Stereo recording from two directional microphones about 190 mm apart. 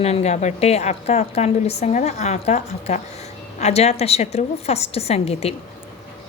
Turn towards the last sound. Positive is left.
turn(degrees=35)  # may be behind; listen again after turning